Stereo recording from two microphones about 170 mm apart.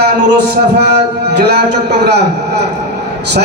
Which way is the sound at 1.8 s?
75° right (ahead or behind).